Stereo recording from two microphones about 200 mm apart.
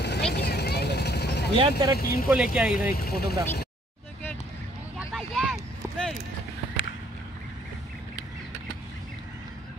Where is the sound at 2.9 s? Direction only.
50° left (ahead or behind).